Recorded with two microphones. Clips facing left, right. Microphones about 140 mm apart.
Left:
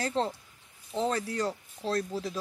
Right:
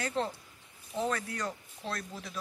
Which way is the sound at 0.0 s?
30° left (ahead or behind).